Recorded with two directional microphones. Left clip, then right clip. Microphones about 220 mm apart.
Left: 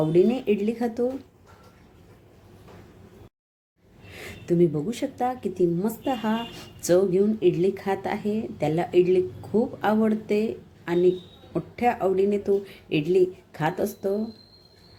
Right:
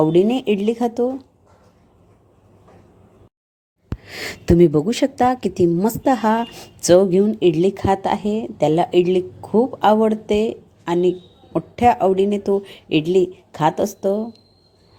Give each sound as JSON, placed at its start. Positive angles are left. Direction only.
{"t": 0.0, "sound": "a woman's voice", "side_deg": -35}
{"t": 4.1, "sound": "a woman's voice", "side_deg": -40}